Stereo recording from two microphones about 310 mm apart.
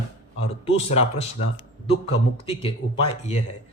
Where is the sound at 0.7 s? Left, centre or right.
Centre.